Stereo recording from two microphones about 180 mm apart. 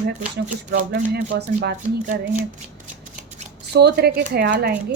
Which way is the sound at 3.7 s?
60° right (ahead or behind).